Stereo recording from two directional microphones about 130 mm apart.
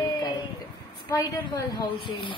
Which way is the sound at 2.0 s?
40° left (ahead or behind).